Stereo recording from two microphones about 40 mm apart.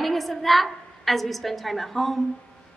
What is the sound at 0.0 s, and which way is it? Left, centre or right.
A woman's voice, centre.